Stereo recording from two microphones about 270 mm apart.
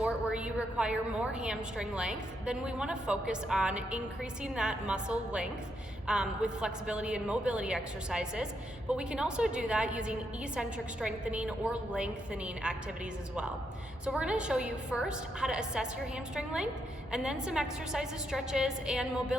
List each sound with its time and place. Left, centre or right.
0.0 s a woman's voice: centre
14.0 s a woman's voice: centre